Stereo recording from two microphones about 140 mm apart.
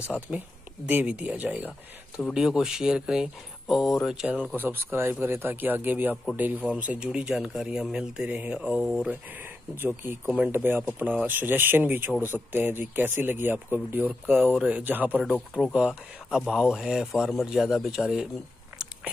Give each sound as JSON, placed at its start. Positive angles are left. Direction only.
{"t": 0.3, "sound": "speech", "side_deg": -5}